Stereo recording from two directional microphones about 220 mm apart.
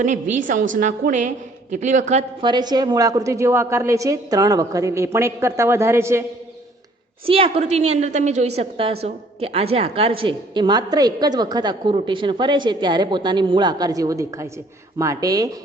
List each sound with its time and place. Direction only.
0.0 s a woman's voice: 35° right (ahead or behind)
2.4 s a woman's voice: 20° right (ahead or behind)
7.3 s a woman's voice: 25° right (ahead or behind)